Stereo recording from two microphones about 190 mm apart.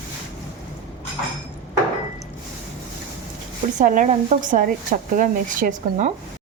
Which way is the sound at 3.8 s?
40° right (ahead or behind).